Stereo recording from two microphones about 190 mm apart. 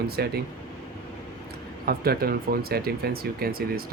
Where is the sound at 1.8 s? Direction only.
55° right (ahead or behind).